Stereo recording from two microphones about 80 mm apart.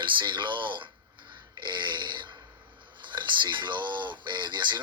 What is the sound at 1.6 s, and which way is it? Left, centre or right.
A man's voice, right.